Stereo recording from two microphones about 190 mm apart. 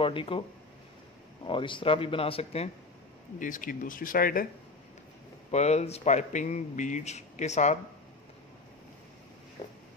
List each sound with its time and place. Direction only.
0.0 s speech: 30° left (ahead or behind)
1.4 s speech: 25° left (ahead or behind)
3.3 s speech: 45° left (ahead or behind)
5.5 s speech: 35° left (ahead or behind)